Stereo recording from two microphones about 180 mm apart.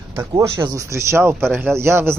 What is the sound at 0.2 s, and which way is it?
Speech, 20° right (ahead or behind).